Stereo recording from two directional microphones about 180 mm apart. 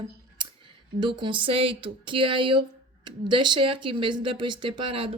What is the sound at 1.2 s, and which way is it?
A woman's voice, 25° right (ahead or behind).